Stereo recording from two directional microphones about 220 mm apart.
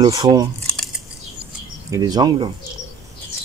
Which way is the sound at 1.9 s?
15° right (ahead or behind).